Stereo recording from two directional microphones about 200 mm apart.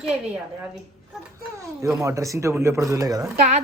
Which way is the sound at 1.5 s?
15° right (ahead or behind).